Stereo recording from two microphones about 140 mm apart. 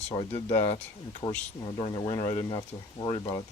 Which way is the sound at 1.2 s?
35° left (ahead or behind).